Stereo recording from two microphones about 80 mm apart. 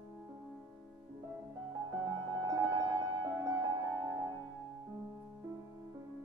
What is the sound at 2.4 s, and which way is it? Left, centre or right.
Music, right.